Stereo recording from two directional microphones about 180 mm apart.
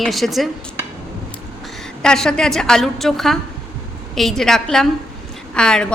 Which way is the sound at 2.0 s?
5° left (ahead or behind).